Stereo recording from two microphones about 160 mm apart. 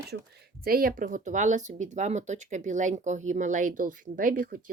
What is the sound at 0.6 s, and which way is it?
Speech, 65° right (ahead or behind).